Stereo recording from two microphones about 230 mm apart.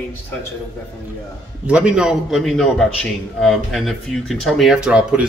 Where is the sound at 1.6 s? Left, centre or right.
Centre.